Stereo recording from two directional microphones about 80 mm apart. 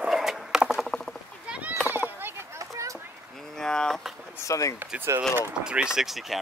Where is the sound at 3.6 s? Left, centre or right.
Centre.